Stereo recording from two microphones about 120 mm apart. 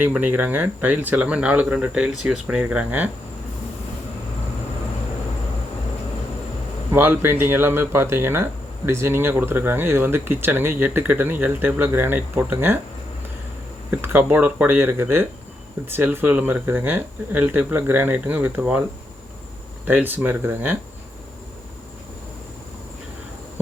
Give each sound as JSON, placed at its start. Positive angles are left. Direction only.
{"t": 0.0, "sound": "speech", "side_deg": -15}
{"t": 6.9, "sound": "speech", "side_deg": -15}
{"t": 14.0, "sound": "speech", "side_deg": -15}
{"t": 19.9, "sound": "speech", "side_deg": -15}